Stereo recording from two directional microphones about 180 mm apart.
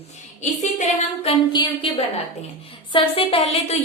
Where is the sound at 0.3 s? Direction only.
40° left (ahead or behind).